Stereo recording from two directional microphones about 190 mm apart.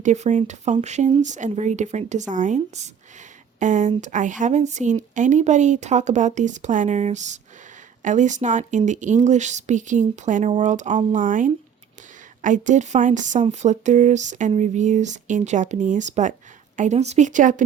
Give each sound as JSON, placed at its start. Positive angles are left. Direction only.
{"t": 0.0, "sound": "speech", "side_deg": -40}